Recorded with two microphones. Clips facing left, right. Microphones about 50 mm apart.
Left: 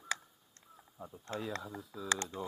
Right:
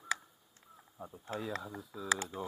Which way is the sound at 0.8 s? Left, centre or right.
Centre.